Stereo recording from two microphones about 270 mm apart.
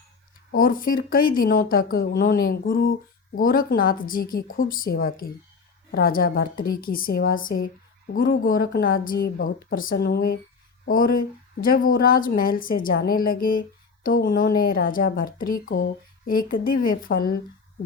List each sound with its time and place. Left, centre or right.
0.5 s a woman's voice: left